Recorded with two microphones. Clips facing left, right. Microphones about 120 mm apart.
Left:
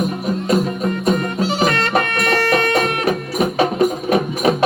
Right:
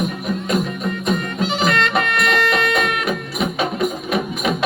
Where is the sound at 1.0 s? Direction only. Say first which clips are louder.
Left 3 dB; 40° left (ahead or behind).